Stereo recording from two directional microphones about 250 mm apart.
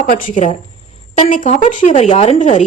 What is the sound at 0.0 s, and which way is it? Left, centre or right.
A woman's voice, left.